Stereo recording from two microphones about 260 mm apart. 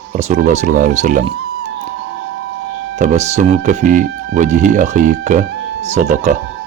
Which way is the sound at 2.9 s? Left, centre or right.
Right.